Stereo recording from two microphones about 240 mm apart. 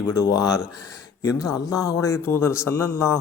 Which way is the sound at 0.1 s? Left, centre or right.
Centre.